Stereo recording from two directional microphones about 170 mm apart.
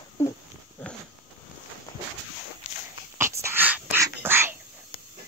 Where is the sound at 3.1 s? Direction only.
15° right (ahead or behind).